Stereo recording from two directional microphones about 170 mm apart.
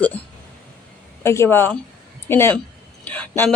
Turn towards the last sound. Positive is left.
turn(degrees=10)  # may be behind; listen again after turning